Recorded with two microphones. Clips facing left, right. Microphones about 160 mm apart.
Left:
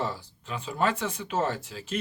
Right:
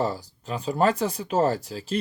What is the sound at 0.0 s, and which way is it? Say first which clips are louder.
Speech: right 5 dB; 40° right (ahead or behind).